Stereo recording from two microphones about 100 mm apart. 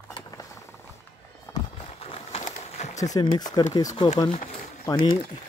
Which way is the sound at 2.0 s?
80° left.